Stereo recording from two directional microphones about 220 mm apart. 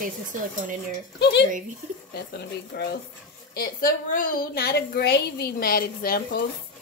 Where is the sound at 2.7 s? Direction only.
45° left (ahead or behind).